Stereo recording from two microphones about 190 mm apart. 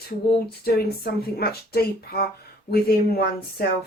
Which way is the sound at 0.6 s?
55° left (ahead or behind).